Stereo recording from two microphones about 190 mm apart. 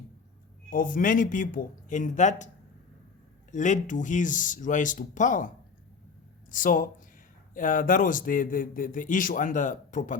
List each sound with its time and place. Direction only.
0.7 s a man's voice: 45° left (ahead or behind)
3.5 s a man's voice: 40° left (ahead or behind)
6.5 s a man's voice: 45° left (ahead or behind)